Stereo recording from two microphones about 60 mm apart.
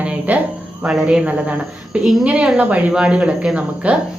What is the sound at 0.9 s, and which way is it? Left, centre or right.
A woman's voice, centre.